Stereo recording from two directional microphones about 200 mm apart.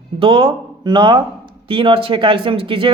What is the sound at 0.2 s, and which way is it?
Speech, 25° right (ahead or behind).